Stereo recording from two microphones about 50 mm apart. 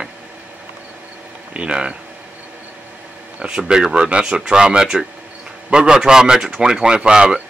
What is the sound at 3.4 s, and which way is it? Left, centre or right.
Speech, centre.